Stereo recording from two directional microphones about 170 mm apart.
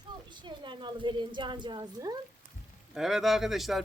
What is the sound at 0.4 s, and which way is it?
Speech, 30° right (ahead or behind).